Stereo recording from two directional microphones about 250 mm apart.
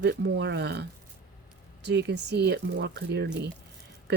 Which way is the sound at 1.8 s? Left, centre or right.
Right.